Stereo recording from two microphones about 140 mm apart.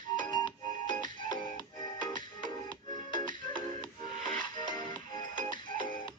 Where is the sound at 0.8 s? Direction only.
70° right (ahead or behind).